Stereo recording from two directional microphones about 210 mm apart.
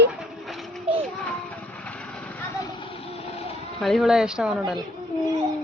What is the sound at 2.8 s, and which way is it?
Vehicle, 25° left (ahead or behind).